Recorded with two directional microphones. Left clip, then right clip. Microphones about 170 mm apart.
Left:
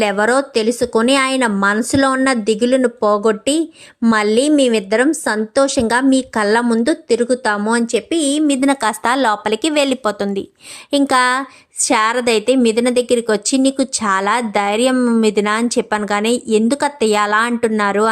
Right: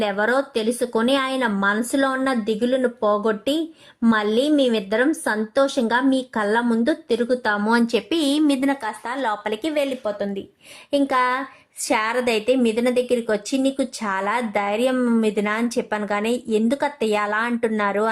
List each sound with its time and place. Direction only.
0.0 s a woman's voice: 20° left (ahead or behind)
8.8 s speech: 55° left (ahead or behind)
9.2 s a woman's voice: 30° left (ahead or behind)
10.9 s a woman's voice: 30° left (ahead or behind)